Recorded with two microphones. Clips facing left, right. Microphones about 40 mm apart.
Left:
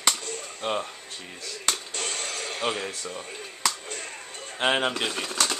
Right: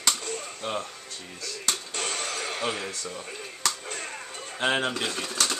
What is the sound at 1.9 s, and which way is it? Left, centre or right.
Music, centre.